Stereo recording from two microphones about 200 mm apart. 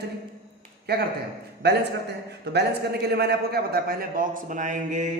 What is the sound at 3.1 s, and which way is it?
A man's voice, 50° right (ahead or behind).